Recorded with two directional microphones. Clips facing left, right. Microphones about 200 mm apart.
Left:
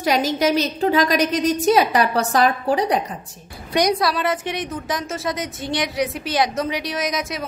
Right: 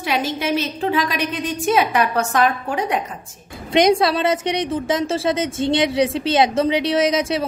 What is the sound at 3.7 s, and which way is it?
A woman's voice, 25° right (ahead or behind).